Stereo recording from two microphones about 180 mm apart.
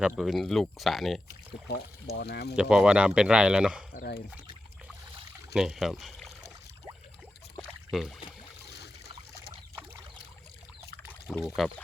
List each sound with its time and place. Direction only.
0.0 s speech: centre (ahead or behind)
2.1 s speech: 65° left (ahead or behind)
2.6 s speech: 5° right (ahead or behind)
3.9 s rowboat: 55° left (ahead or behind)
5.5 s speech: centre (ahead or behind)
7.9 s rowboat: centre (ahead or behind)
8.7 s boat: 65° left (ahead or behind)
11.4 s speech: centre (ahead or behind)